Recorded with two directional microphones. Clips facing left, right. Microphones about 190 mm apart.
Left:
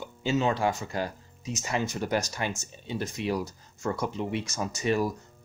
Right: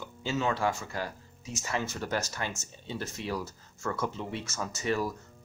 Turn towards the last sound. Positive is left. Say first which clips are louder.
# left 4 dB
turn(degrees=15)  # may be behind; listen again after turning